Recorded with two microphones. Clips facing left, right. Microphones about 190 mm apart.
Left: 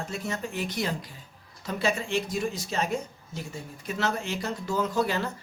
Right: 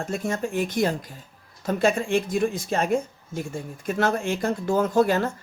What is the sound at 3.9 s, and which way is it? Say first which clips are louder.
Speech: right 6 dB; 50° right (ahead or behind).